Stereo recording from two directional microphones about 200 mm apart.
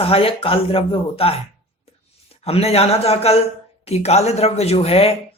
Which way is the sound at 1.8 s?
30° left (ahead or behind).